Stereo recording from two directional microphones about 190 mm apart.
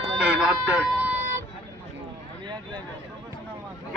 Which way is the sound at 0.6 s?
10° right (ahead or behind).